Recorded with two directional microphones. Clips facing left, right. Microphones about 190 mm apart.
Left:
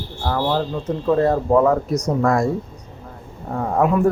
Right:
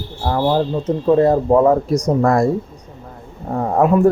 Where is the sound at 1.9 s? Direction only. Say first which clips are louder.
Right 3 dB; 35° right (ahead or behind).